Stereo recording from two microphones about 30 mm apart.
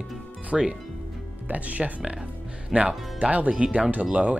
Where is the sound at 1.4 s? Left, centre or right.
Right.